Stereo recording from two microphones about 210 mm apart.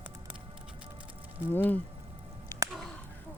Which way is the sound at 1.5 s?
10° left (ahead or behind).